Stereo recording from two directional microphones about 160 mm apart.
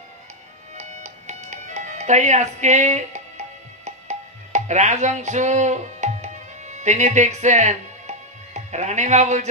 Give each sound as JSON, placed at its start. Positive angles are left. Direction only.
{"t": 0.7, "sound": "music", "side_deg": -45}